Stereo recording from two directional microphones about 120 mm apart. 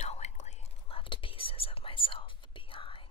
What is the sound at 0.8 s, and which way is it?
Whispering, 45° left (ahead or behind).